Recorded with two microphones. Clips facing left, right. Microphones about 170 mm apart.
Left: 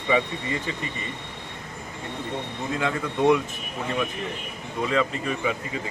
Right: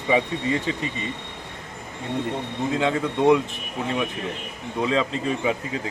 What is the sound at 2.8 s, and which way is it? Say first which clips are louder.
Speech: right 2 dB; 20° right (ahead or behind).